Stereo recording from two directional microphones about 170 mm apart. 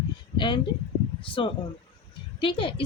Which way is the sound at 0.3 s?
25° left (ahead or behind).